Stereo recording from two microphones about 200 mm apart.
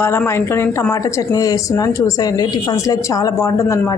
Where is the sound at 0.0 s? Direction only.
10° left (ahead or behind).